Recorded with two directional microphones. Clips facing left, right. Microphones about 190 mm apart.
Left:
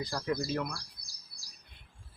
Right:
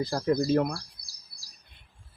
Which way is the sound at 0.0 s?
40° right (ahead or behind).